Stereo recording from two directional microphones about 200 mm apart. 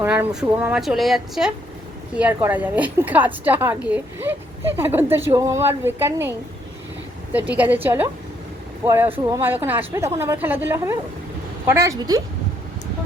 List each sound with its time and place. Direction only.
0.0 s a woman's voice: 5° right (ahead or behind)
7.3 s a woman's voice: 10° right (ahead or behind)
9.0 s speech: 25° right (ahead or behind)
9.4 s a woman's voice: 10° right (ahead or behind)